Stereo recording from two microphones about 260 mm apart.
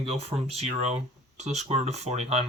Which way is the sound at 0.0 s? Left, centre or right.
Right.